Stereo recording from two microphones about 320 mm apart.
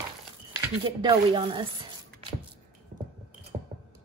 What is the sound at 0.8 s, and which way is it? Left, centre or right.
Speech, centre.